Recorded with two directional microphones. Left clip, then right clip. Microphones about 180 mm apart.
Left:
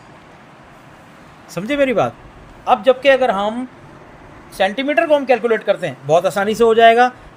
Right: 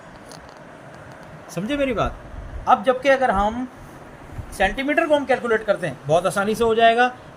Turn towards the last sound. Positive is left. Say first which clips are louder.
# left 6 dB
turn(degrees=55)  # may be behind; listen again after turning